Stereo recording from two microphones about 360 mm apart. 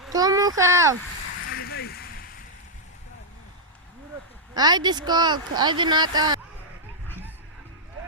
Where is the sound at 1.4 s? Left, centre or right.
Left.